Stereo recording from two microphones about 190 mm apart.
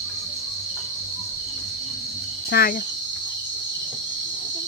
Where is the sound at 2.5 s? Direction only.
55° left (ahead or behind).